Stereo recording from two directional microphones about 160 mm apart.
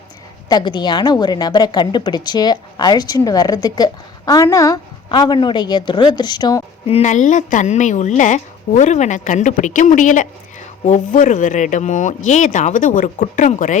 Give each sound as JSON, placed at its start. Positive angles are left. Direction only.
{"t": 0.4, "sound": "a woman's voice", "side_deg": 25}
{"t": 6.9, "sound": "a woman's voice", "side_deg": 45}